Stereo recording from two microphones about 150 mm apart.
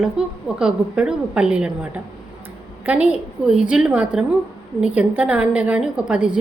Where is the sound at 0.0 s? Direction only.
5° right (ahead or behind).